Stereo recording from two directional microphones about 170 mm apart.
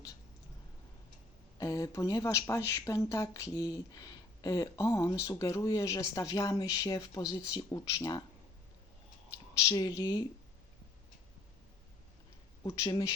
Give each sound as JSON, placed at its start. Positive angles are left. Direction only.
{"t": 1.5, "sound": "speech", "side_deg": 20}
{"t": 9.6, "sound": "speech", "side_deg": 20}
{"t": 12.6, "sound": "speech", "side_deg": 25}